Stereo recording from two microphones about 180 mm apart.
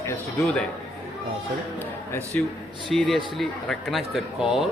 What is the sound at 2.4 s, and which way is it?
A man's voice, 10° left (ahead or behind).